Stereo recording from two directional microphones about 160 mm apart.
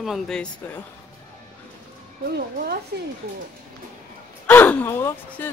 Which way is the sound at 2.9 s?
85° right.